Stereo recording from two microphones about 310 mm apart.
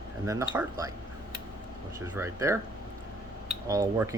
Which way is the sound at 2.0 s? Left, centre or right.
Centre.